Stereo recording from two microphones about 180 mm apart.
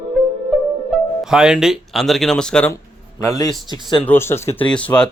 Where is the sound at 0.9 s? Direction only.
Centre (ahead or behind).